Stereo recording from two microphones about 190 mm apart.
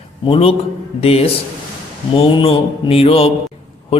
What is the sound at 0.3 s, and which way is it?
A man's voice, 30° left (ahead or behind).